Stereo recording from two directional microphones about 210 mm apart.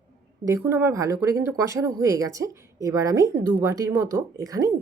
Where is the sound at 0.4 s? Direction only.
15° right (ahead or behind).